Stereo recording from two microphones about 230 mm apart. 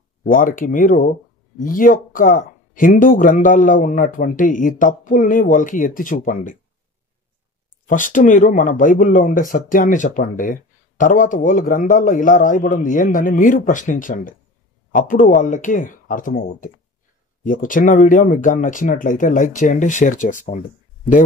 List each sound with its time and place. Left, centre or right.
0.2 s speech: left
7.9 s speech: left